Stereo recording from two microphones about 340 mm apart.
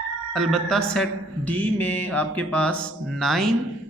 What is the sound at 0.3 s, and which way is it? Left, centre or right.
A man's voice, centre.